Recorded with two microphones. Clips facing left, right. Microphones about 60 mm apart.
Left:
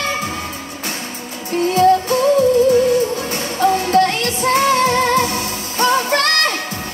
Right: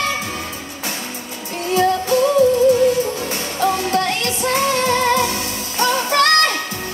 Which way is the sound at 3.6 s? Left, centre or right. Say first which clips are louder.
Left 5 dB; left.